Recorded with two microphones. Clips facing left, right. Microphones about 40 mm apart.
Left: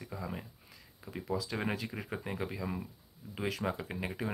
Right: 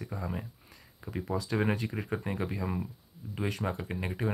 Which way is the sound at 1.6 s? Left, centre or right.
Centre.